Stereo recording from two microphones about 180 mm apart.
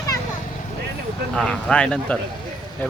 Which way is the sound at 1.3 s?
5° left (ahead or behind).